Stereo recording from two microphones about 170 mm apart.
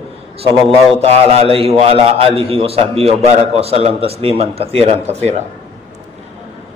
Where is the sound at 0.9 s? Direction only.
35° right (ahead or behind).